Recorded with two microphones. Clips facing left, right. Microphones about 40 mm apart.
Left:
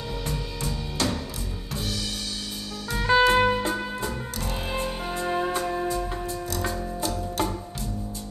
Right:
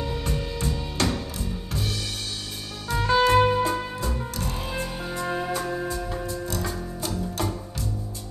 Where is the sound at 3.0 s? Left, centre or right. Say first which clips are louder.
Even; left.